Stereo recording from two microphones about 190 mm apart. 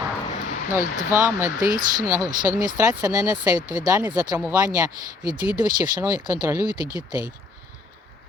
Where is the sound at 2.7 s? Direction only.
15° right (ahead or behind).